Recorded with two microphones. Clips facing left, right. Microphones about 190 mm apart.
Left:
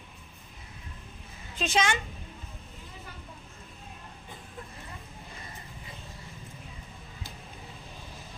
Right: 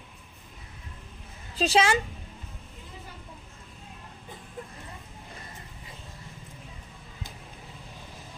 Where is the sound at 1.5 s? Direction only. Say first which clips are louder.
Right 5 dB; 35° right (ahead or behind).